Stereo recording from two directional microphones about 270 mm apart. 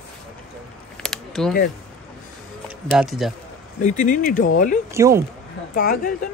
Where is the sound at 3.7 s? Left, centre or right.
Left.